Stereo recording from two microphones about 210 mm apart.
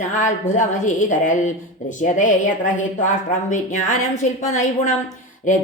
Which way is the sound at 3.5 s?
35° left (ahead or behind).